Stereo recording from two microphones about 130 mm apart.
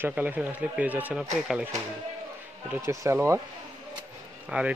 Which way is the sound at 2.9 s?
20° right (ahead or behind).